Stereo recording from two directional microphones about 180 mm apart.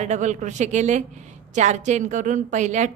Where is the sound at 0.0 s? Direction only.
40° right (ahead or behind).